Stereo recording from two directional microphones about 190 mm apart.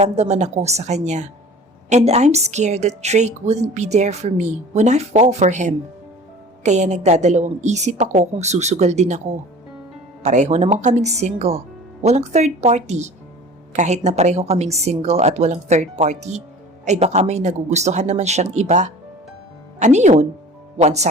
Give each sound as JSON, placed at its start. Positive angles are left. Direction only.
{"t": 0.0, "sound": "a woman's voice", "side_deg": -35}